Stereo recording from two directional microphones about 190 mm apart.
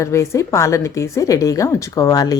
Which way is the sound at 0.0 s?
15° left (ahead or behind).